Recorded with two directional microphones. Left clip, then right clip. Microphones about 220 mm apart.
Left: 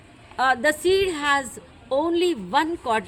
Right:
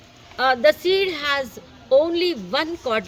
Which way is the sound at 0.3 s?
20° left (ahead or behind).